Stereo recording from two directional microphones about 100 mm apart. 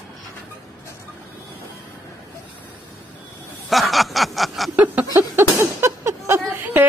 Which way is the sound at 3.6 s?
Centre (ahead or behind).